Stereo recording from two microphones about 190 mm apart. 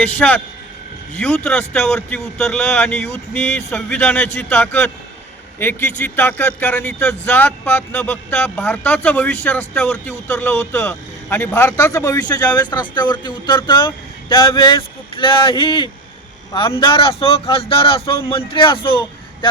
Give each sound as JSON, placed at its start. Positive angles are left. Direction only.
{"t": 0.0, "sound": "a man's voice", "side_deg": 5}